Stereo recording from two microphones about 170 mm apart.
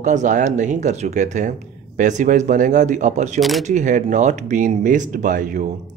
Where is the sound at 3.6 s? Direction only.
45° right (ahead or behind).